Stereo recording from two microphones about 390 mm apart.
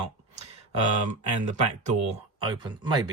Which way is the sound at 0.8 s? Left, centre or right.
Right.